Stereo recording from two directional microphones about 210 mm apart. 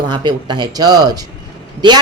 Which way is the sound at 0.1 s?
20° right (ahead or behind).